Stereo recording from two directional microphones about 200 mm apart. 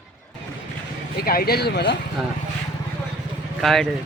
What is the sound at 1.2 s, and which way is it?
Speech, 50° left (ahead or behind).